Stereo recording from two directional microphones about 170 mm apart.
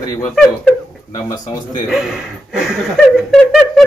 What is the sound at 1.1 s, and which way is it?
Speech, 25° left (ahead or behind).